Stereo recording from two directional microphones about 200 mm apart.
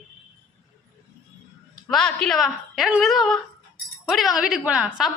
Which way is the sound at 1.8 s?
5° left (ahead or behind).